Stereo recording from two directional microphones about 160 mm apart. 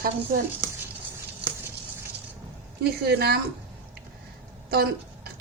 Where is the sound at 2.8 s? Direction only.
90° right.